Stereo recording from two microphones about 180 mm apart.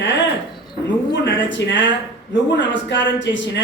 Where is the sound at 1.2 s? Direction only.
85° left.